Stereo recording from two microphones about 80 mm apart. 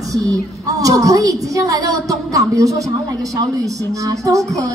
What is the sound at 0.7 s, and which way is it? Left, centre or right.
A woman's voice, right.